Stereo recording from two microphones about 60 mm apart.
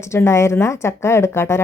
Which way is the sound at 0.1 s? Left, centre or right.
Left.